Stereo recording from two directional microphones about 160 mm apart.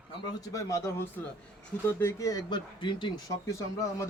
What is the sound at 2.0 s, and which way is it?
A man's voice, 20° left (ahead or behind).